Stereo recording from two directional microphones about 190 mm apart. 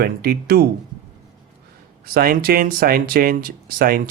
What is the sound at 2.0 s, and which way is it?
Speech, 50° right (ahead or behind).